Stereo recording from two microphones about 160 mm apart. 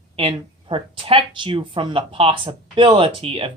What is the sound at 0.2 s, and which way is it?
Speech, 35° right (ahead or behind).